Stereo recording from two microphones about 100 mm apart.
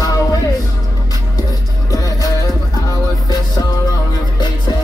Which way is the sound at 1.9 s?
35° left (ahead or behind).